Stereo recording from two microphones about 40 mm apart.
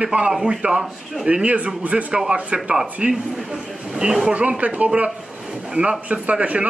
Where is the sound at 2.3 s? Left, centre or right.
Right.